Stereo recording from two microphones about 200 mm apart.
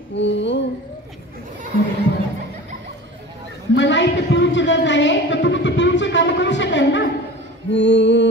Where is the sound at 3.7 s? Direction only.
65° left (ahead or behind).